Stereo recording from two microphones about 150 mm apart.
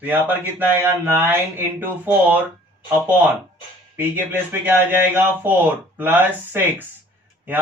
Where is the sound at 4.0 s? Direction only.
15° right (ahead or behind).